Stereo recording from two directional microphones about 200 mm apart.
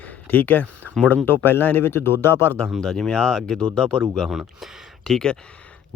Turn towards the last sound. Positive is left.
turn(degrees=5)  # may be behind; listen again after turning